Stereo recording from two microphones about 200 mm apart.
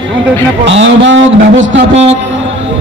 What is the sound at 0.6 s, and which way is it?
Speech, 65° right (ahead or behind).